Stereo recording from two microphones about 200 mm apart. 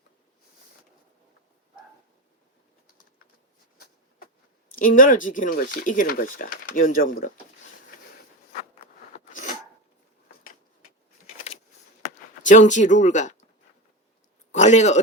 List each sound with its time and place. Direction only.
4.7 s speech: 45° left (ahead or behind)
9.1 s sneeze: 40° left (ahead or behind)
12.0 s speech: 40° left (ahead or behind)
14.5 s speech: 35° left (ahead or behind)